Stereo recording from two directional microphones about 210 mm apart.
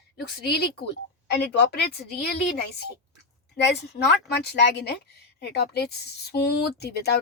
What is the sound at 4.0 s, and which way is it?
A woman's voice, 50° left (ahead or behind).